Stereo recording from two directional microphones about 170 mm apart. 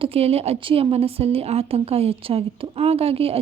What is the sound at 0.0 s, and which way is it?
A woman's voice, 35° right (ahead or behind).